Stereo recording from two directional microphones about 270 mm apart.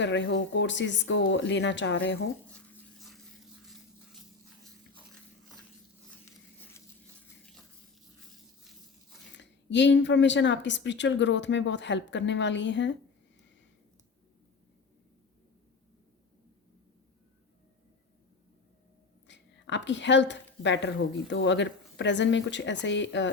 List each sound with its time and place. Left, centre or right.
0.0 s a woman's voice: left
2.5 s toothbrush: centre
9.3 s a woman's voice: left
19.3 s a woman's voice: left